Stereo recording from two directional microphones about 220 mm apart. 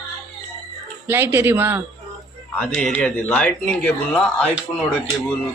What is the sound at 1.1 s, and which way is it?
Speech, 10° right (ahead or behind).